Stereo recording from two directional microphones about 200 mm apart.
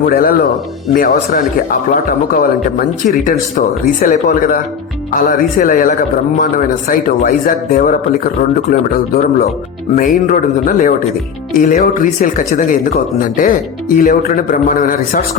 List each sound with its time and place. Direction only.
0.0 s a man's voice: 45° left (ahead or behind)
13.9 s speech: 45° left (ahead or behind)